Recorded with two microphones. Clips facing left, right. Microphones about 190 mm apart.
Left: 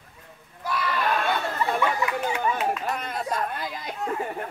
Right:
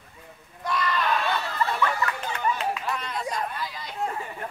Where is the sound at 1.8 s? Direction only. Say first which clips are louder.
Left 1 dB; 15° left (ahead or behind).